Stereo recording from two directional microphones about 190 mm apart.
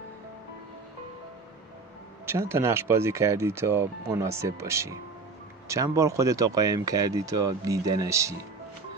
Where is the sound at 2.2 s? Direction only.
10° right (ahead or behind).